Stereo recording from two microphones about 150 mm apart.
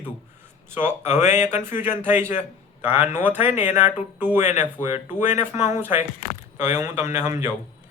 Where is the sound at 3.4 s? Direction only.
50° left (ahead or behind).